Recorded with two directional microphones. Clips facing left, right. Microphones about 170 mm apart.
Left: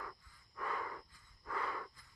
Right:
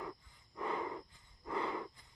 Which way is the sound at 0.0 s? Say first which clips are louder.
Right 5 dB; 20° right (ahead or behind).